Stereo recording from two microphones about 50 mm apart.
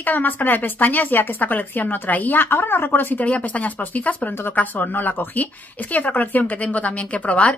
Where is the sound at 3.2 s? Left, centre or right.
Left.